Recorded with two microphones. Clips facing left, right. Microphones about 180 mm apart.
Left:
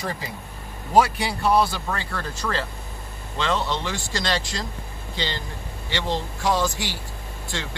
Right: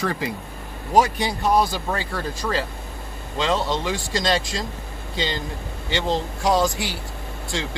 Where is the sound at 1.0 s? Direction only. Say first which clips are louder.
Even; 20° right (ahead or behind).